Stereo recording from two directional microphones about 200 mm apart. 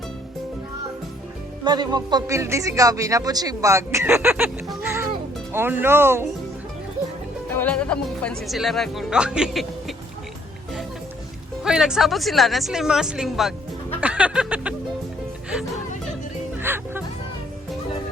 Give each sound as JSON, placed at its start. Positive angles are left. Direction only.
{"t": 1.6, "sound": "speech", "side_deg": -20}
{"t": 4.7, "sound": "music", "side_deg": -10}
{"t": 5.5, "sound": "speech", "side_deg": -10}
{"t": 7.5, "sound": "speech", "side_deg": 10}
{"t": 11.6, "sound": "speech", "side_deg": -5}
{"t": 14.0, "sound": "music", "side_deg": -5}
{"t": 16.6, "sound": "music", "side_deg": -10}